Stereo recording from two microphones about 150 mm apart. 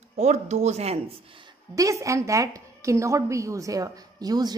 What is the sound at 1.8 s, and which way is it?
A woman's voice, 20° right (ahead or behind).